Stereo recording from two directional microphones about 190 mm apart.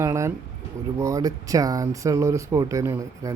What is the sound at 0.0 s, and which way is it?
Speech, 15° right (ahead or behind).